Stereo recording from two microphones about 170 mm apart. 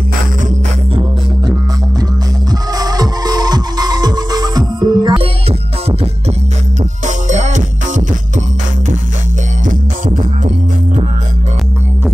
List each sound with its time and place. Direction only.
2.8 s music: 20° right (ahead or behind)
7.1 s music: 45° right (ahead or behind)
9.7 s music: 50° right (ahead or behind)